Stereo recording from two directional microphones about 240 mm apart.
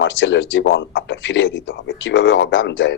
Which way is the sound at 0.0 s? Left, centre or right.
Left.